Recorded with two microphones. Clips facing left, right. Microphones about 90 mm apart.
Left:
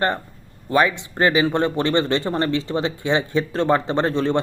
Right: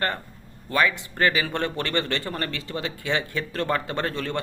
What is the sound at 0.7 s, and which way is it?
Speech, 25° left (ahead or behind).